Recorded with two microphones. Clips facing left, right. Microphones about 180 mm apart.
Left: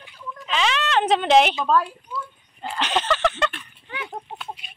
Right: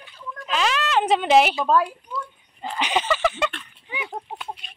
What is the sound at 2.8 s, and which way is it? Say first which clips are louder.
Speech: even; 10° right (ahead or behind).